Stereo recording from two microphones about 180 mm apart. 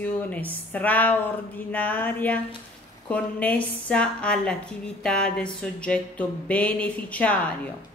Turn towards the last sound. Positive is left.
turn(degrees=10)  # may be behind; listen again after turning